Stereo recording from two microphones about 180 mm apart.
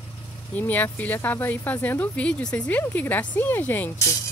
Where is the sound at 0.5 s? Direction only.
10° left (ahead or behind).